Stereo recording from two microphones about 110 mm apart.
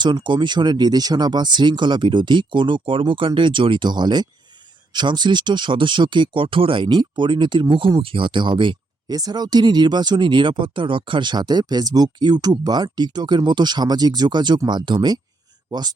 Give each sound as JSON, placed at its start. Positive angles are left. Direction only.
{"t": 0.0, "sound": "speech", "side_deg": -45}
{"t": 9.1, "sound": "speech", "side_deg": -35}